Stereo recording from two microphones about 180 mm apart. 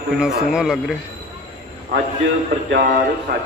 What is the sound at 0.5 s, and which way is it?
Speech, 5° right (ahead or behind).